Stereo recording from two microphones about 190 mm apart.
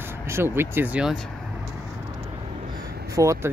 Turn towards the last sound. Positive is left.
turn(degrees=-15)  # may be behind; listen again after turning